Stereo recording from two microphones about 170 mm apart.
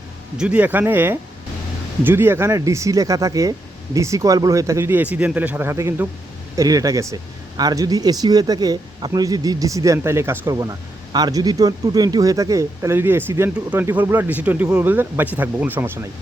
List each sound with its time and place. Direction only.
0.3 s speech: 5° right (ahead or behind)